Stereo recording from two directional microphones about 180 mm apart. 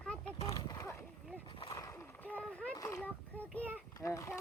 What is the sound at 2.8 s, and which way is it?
Speech, 15° left (ahead or behind).